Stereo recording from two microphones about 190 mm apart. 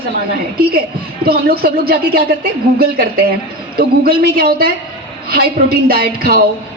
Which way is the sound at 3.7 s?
50° right (ahead or behind).